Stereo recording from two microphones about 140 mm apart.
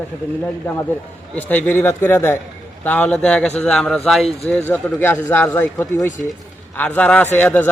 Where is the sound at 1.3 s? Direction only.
10° left (ahead or behind).